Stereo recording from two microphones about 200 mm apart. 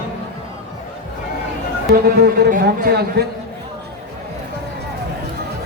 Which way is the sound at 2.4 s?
50° right (ahead or behind).